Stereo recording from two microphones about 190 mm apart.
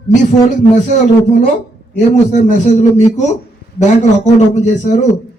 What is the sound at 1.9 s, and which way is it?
A man's voice, 40° left (ahead or behind).